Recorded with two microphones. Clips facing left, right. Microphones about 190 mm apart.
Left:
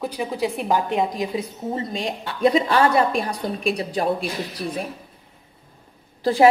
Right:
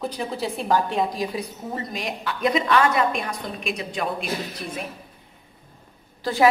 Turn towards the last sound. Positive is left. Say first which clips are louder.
# left 4 dB
turn(degrees=30)  # may be behind; listen again after turning